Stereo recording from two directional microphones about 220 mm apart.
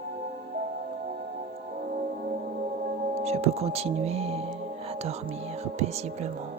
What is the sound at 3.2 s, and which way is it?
Music, 30° right (ahead or behind).